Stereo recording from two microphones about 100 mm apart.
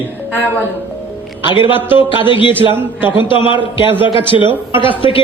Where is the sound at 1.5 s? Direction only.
55° left (ahead or behind).